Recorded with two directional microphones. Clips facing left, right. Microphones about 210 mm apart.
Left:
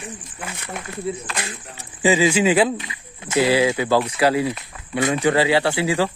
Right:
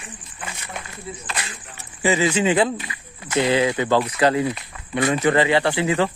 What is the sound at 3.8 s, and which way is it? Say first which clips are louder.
Speech: even; 10° left (ahead or behind).